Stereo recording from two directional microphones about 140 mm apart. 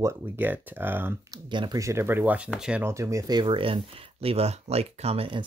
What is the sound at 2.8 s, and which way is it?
Speech, 20° right (ahead or behind).